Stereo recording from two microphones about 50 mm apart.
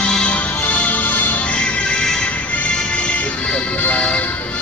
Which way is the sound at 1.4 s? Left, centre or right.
Left.